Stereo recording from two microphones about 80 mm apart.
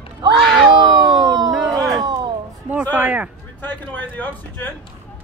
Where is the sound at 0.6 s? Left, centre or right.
Right.